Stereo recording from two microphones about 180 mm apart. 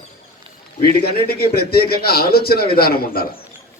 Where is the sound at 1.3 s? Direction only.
60° left (ahead or behind).